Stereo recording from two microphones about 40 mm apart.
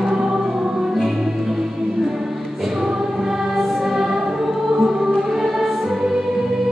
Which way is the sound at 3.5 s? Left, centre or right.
Centre.